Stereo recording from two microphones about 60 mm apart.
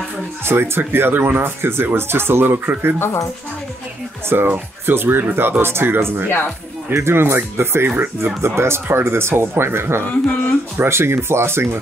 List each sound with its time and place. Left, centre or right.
0.5 s speech: right
4.3 s speech: right
8.4 s speech: right